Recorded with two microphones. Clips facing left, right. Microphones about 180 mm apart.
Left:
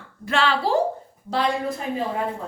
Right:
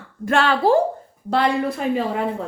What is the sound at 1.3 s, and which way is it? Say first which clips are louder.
Speech: right 4 dB; 60° right (ahead or behind).